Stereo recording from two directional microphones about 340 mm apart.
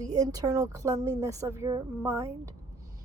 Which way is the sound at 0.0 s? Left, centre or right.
Centre.